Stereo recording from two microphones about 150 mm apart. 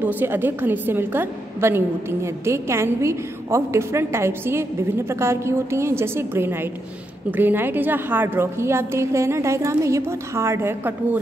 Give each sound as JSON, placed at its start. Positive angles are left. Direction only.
{"t": 0.0, "sound": "a woman's voice", "side_deg": -10}